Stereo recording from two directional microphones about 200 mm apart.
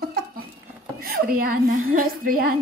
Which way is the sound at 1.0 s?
45° right (ahead or behind).